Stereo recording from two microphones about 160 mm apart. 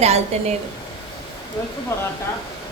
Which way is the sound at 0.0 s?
40° right (ahead or behind).